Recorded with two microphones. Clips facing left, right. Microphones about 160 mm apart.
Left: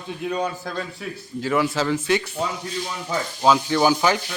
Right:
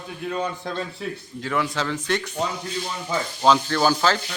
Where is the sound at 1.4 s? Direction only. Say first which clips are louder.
Left 4 dB; 5° left (ahead or behind).